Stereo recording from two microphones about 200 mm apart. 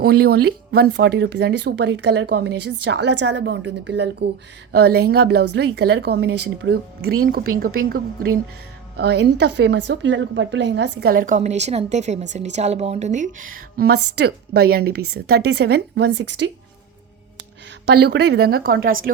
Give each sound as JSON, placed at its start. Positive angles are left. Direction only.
{"t": 0.0, "sound": "speech", "side_deg": -50}
{"t": 9.0, "sound": "a woman's voice", "side_deg": -55}
{"t": 13.7, "sound": "a woman's voice", "side_deg": -50}
{"t": 17.8, "sound": "a woman's voice", "side_deg": -55}